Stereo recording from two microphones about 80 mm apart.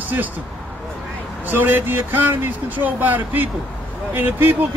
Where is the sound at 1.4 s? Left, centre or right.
Right.